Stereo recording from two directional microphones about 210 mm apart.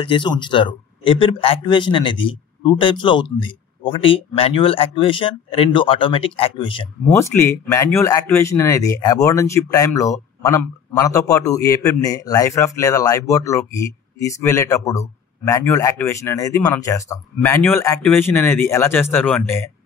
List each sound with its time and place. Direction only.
0.0 s a man's voice: 25° left (ahead or behind)
7.2 s speech: 10° left (ahead or behind)